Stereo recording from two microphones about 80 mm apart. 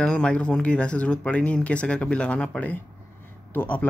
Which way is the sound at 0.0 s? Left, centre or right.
Centre.